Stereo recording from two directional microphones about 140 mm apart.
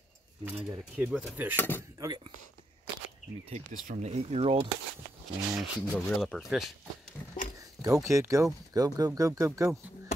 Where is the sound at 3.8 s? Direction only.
55° right (ahead or behind).